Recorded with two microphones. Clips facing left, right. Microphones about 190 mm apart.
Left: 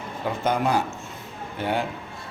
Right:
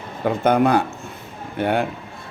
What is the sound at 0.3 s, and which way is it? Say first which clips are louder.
A man's voice: right 7 dB; 60° right (ahead or behind).